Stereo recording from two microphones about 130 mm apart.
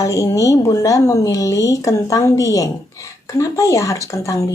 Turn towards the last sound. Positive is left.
turn(degrees=25)  # may be behind; listen again after turning